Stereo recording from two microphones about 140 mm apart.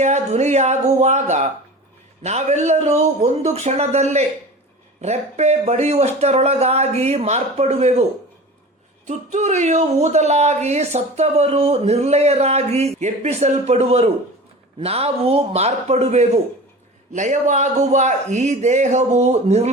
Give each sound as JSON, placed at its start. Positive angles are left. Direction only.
{"t": 0.0, "sound": "speech", "side_deg": -55}
{"t": 9.0, "sound": "speech", "side_deg": -55}
{"t": 17.1, "sound": "speech", "side_deg": -60}